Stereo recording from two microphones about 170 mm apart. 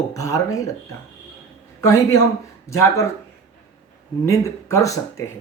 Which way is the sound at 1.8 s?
15° left (ahead or behind).